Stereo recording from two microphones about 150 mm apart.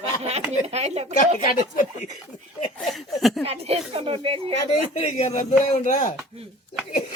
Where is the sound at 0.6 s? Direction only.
45° right (ahead or behind).